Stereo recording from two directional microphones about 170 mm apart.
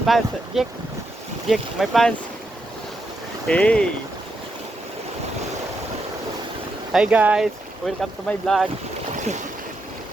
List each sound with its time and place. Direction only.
0.0 s speech: centre (ahead or behind)
3.4 s speech: 5° left (ahead or behind)
6.9 s speech: 5° right (ahead or behind)
9.1 s boat: 45° right (ahead or behind)